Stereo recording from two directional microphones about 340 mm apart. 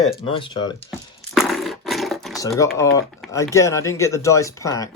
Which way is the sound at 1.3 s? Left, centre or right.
Centre.